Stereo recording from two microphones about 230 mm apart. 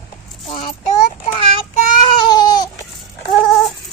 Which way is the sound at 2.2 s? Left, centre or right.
Centre.